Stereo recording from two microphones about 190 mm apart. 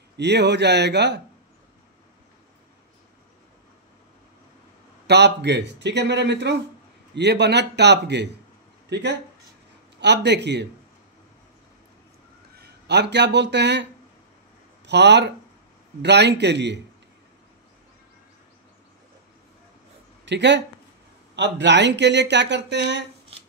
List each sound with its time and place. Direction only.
0.2 s speech: 60° right (ahead or behind)
5.0 s speech: 65° right (ahead or behind)
12.5 s speech: 60° right (ahead or behind)
14.9 s speech: 65° right (ahead or behind)
20.2 s speech: 65° right (ahead or behind)